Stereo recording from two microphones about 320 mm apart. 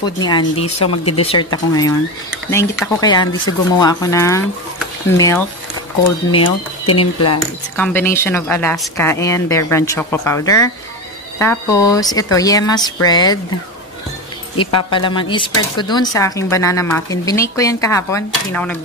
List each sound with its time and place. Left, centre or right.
0.0 s speech: centre
0.7 s speech: left
1.1 s speech: centre
7.7 s speech: centre
14.9 s speech: centre